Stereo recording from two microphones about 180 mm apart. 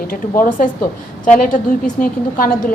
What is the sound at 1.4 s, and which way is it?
A woman's voice, 50° left (ahead or behind).